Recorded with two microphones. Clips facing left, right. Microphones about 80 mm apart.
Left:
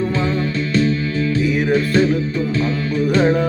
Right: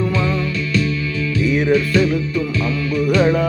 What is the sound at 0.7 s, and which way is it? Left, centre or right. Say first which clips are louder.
Music: left 4 dB; left.